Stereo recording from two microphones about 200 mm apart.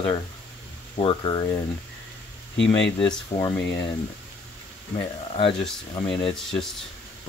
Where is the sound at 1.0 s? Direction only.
25° left (ahead or behind).